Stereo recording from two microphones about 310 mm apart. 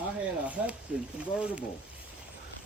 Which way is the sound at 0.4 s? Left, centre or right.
Centre.